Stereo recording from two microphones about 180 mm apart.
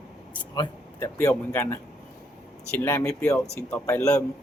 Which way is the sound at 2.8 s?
10° left (ahead or behind).